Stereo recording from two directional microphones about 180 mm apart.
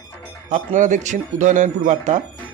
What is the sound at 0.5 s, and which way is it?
Speech, 45° right (ahead or behind).